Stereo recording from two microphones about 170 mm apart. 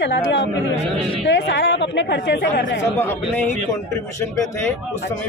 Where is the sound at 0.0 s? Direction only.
90° left.